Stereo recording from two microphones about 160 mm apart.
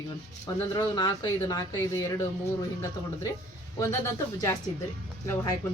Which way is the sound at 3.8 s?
20° left (ahead or behind).